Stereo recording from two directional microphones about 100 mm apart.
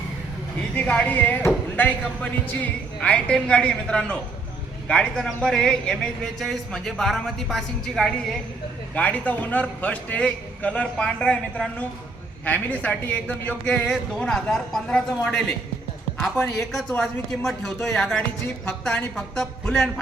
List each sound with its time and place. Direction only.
0.8 s a man's voice: 15° left (ahead or behind)
9.0 s a man's voice: 15° left (ahead or behind)
17.9 s a man's voice: 5° left (ahead or behind)